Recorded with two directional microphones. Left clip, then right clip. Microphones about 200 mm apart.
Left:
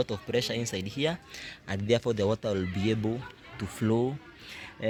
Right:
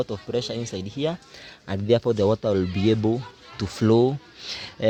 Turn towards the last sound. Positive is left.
turn(degrees=-55)  # may be behind; listen again after turning